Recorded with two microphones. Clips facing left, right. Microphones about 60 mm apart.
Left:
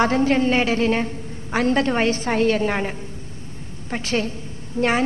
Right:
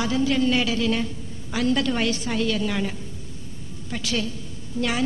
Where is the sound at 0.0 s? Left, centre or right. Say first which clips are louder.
Left 4 dB; left.